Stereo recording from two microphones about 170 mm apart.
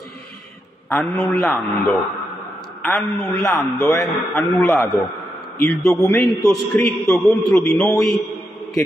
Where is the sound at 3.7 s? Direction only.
20° left (ahead or behind).